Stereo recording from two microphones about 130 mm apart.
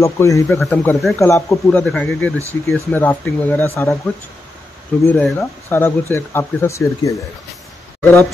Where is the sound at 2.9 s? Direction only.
15° left (ahead or behind).